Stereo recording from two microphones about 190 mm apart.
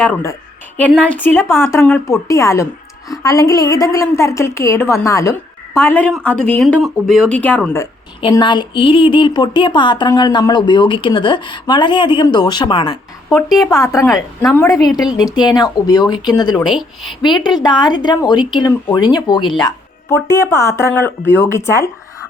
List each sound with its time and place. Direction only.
0.0 s a woman's voice: 10° left (ahead or behind)
8.2 s a woman's voice: 25° left (ahead or behind)
16.6 s a woman's voice: centre (ahead or behind)
17.4 s a woman's voice: 20° left (ahead or behind)